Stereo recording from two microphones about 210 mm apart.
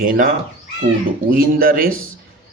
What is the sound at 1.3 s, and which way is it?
Speech, 45° right (ahead or behind).